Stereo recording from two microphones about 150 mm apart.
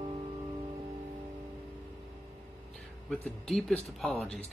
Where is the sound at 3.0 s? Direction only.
5° left (ahead or behind).